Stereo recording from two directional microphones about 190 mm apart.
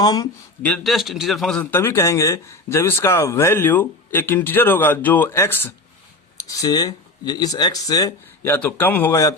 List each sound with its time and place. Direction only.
0.0 s speech: 20° left (ahead or behind)
0.6 s a man's voice: 5° left (ahead or behind)